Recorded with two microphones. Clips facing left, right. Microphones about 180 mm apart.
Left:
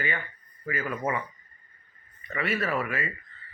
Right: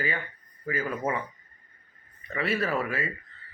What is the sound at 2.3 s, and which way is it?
Speech, 30° right (ahead or behind).